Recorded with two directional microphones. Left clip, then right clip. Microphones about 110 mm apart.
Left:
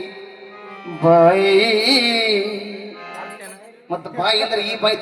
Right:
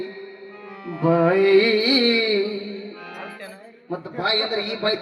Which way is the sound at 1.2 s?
30° left (ahead or behind).